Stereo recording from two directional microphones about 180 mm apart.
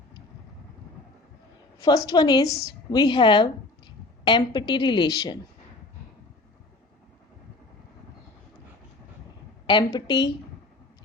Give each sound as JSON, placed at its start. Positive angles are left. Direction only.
{"t": 1.8, "sound": "a woman's voice", "side_deg": 20}
{"t": 9.6, "sound": "a woman's voice", "side_deg": 25}